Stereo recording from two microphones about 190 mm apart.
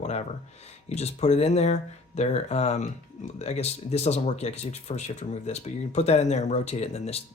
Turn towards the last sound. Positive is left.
turn(degrees=35)  # may be behind; listen again after turning